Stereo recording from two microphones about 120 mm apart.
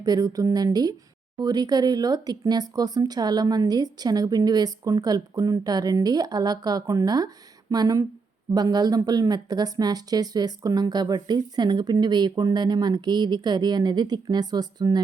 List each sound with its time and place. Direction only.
0.0 s speech: 30° right (ahead or behind)